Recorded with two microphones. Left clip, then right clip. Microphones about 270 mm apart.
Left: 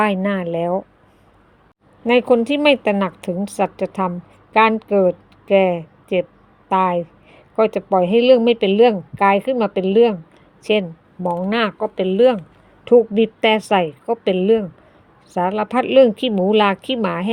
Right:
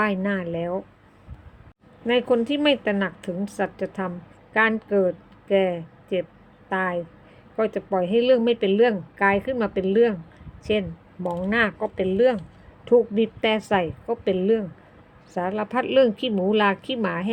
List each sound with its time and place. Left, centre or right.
0.0 s speech: left
2.0 s speech: left